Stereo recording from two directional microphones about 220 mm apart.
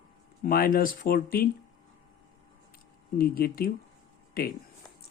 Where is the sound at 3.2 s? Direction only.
45° left (ahead or behind).